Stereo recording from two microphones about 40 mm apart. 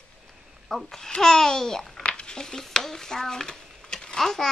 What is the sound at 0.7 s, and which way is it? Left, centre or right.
Speech, centre.